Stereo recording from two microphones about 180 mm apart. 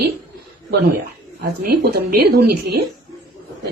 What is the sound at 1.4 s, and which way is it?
A woman's voice, 60° right (ahead or behind).